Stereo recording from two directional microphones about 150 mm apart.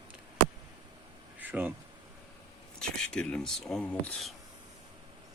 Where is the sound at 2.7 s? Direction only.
5° left (ahead or behind).